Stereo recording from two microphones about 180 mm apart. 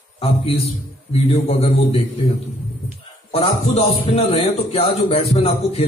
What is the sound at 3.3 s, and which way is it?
A man's voice, 35° left (ahead or behind).